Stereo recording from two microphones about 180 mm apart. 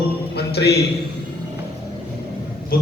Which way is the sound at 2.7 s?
55° left (ahead or behind).